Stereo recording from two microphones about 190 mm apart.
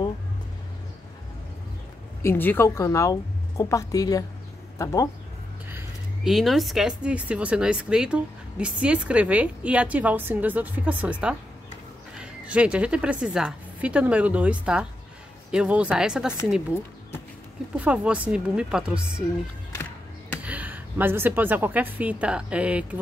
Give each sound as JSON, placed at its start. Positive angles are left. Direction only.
{"t": 2.2, "sound": "a woman's voice", "side_deg": 10}
{"t": 5.7, "sound": "speech", "side_deg": -5}
{"t": 17.7, "sound": "speech", "side_deg": -5}
{"t": 20.4, "sound": "a woman's voice", "side_deg": -10}